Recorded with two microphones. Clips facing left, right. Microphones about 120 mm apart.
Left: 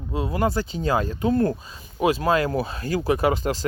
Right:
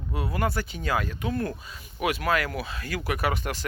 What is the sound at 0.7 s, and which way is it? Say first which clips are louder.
Speech: left 5 dB; 35° left (ahead or behind).